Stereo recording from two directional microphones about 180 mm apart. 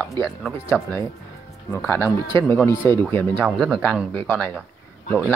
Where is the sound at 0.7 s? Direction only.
10° left (ahead or behind).